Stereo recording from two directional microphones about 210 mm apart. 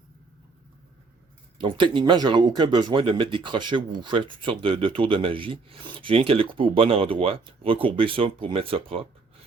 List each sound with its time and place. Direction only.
1.5 s speech: 25° right (ahead or behind)